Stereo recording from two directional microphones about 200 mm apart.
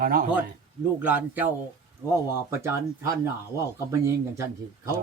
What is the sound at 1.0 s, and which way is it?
A man's voice, 10° right (ahead or behind).